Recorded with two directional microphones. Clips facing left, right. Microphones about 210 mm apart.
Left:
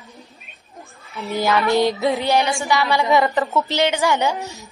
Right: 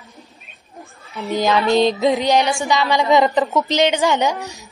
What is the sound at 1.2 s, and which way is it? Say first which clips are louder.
Music: right 2 dB; 15° right (ahead or behind).